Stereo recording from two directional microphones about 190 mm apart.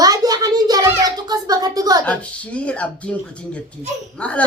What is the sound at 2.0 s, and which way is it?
Speech, 5° left (ahead or behind).